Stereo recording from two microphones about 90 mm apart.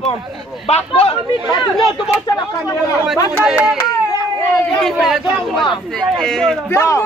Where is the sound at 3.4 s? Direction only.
10° right (ahead or behind).